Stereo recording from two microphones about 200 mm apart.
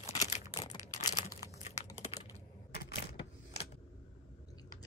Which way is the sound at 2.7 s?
55° left (ahead or behind).